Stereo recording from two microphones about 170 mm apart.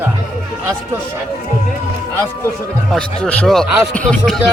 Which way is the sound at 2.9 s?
5° left (ahead or behind).